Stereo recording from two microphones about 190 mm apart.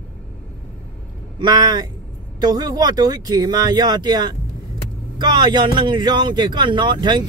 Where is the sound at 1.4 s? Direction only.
20° right (ahead or behind).